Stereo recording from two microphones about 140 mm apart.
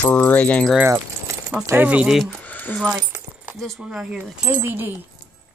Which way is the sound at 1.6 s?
15° right (ahead or behind).